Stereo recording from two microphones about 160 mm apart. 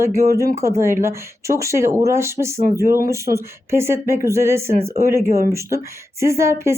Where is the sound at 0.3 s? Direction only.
20° right (ahead or behind).